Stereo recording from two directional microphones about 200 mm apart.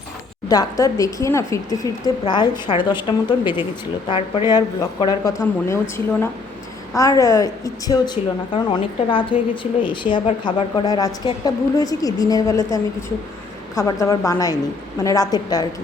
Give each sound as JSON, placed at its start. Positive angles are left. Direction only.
{"t": 0.4, "sound": "speech", "side_deg": 15}
{"t": 6.9, "sound": "speech", "side_deg": 15}